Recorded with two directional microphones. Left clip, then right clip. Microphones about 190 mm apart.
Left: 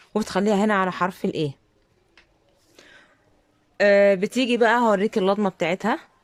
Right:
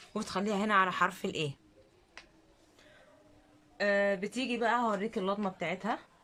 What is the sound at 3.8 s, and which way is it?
Speech, 60° left (ahead or behind).